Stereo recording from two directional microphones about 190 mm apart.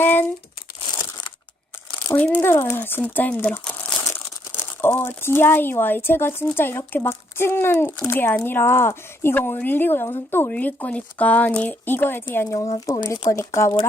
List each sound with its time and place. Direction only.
0.0 s crumpling: 10° left (ahead or behind)
2.0 s speech: 10° left (ahead or behind)